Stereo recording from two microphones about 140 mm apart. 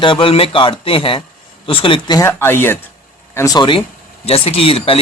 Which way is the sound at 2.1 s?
20° left (ahead or behind).